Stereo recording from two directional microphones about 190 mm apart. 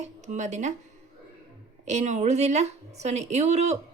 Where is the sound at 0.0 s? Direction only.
40° right (ahead or behind).